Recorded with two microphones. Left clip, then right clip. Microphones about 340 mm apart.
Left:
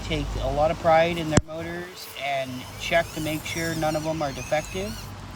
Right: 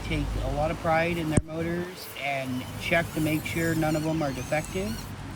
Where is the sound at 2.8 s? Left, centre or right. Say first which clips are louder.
Left 2 dB; centre.